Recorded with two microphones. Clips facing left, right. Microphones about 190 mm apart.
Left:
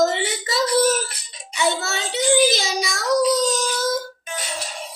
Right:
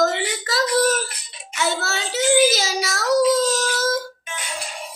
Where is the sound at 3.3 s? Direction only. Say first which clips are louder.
Right 1 dB; centre (ahead or behind).